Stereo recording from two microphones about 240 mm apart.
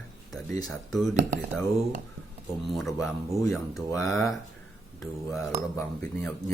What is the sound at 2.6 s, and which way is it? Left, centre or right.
Speech, centre.